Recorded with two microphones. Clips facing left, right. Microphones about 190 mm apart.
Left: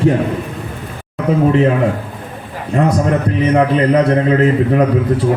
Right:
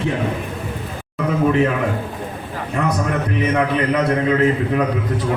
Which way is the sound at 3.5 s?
35° left (ahead or behind).